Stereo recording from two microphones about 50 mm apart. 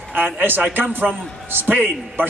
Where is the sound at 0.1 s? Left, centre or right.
Right.